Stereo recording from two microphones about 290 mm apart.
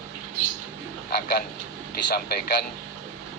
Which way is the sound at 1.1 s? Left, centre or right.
Left.